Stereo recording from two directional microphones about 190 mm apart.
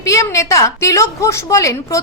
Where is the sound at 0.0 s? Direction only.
15° left (ahead or behind).